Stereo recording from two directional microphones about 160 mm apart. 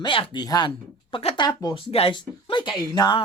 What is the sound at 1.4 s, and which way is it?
A woman's voice, 25° left (ahead or behind).